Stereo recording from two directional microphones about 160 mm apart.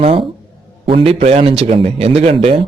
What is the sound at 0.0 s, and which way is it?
A man's voice, 35° right (ahead or behind).